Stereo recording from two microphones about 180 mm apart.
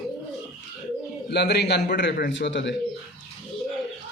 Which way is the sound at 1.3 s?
65° left (ahead or behind).